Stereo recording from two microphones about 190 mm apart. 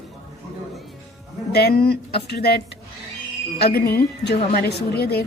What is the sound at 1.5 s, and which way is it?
A woman's voice, 55° left (ahead or behind).